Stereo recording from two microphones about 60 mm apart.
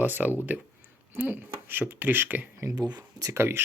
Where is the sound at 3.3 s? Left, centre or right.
Right.